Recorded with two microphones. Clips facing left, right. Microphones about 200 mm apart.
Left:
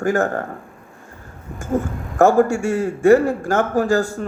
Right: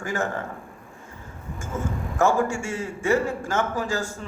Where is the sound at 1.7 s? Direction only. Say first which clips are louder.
Left 8 dB; 45° left (ahead or behind).